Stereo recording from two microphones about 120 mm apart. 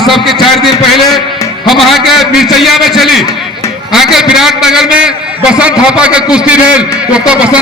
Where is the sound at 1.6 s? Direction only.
Centre (ahead or behind).